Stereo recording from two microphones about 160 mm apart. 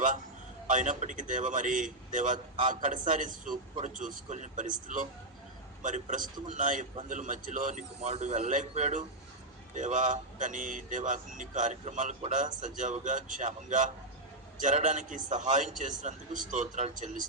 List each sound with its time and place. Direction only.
0.7 s a man's voice: 50° right (ahead or behind)